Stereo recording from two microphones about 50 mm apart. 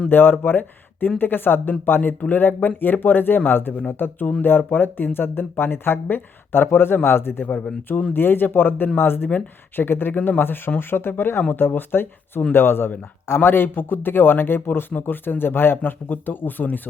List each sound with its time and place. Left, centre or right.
0.1 s speech: left